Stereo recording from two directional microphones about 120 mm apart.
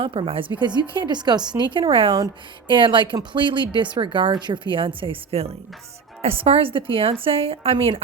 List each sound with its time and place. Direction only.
0.0 s a woman's voice: 50° right (ahead or behind)